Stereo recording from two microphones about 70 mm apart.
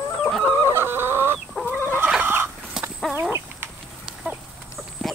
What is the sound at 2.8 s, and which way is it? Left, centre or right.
Chicken, centre.